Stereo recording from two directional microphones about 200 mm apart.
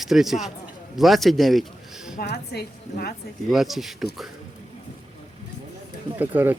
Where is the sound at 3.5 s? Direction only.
Centre (ahead or behind).